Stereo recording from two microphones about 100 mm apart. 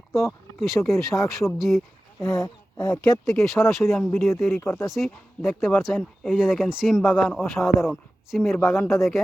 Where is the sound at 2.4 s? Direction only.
40° left (ahead or behind).